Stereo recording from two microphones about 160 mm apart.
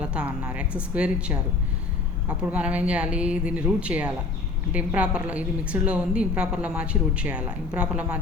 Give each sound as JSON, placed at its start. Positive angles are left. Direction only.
{"t": 0.0, "sound": "a woman's voice", "side_deg": -5}